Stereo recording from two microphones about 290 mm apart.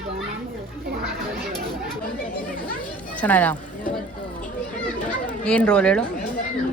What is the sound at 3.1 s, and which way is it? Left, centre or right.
Speech, centre.